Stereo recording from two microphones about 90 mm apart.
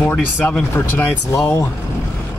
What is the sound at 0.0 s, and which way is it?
Speech, 20° left (ahead or behind).